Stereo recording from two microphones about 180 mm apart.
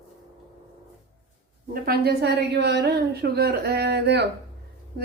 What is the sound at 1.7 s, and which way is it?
A woman's voice, 55° right (ahead or behind).